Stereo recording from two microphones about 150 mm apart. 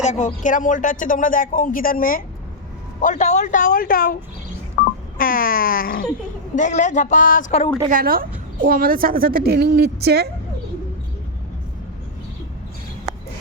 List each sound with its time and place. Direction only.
0.0 s a woman's voice: 50° left (ahead or behind)
3.0 s a woman's voice: 55° left (ahead or behind); by 6.1 s 75° left (ahead or behind)
6.6 s a woman's voice: 55° left (ahead or behind)
7.9 s a woman's voice: 70° right (ahead or behind); by 10.2 s 90° right